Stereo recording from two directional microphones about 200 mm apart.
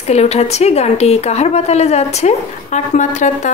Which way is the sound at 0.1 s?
30° left (ahead or behind).